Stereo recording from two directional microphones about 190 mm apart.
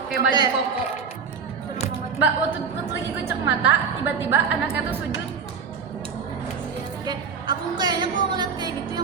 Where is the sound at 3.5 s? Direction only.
10° right (ahead or behind).